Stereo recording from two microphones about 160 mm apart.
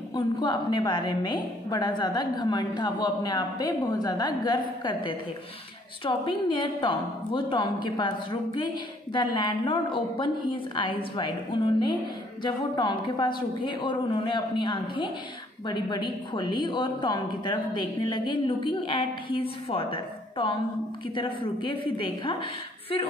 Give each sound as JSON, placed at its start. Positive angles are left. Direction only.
{"t": 0.1, "sound": "a woman's voice", "side_deg": 30}